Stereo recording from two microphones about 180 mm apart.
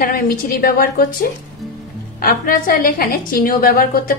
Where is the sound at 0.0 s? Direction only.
50° left (ahead or behind).